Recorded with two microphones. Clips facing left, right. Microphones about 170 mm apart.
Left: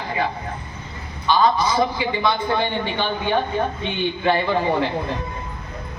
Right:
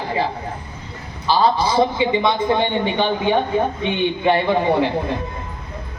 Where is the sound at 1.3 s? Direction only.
30° right (ahead or behind); by 4.9 s 15° right (ahead or behind).